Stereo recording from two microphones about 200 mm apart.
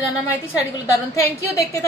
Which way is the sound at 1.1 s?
15° left (ahead or behind).